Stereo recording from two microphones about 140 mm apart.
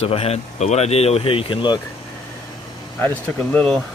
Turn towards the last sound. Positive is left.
turn(degrees=5)  # may be behind; listen again after turning